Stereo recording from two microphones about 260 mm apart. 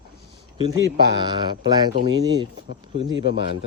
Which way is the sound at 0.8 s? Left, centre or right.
Right.